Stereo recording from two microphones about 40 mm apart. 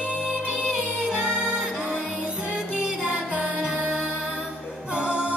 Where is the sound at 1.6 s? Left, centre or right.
Centre.